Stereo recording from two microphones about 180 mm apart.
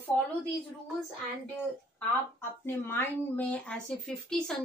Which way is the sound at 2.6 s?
15° left (ahead or behind).